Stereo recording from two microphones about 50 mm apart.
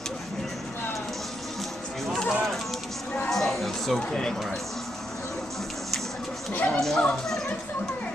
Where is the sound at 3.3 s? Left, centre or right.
Centre.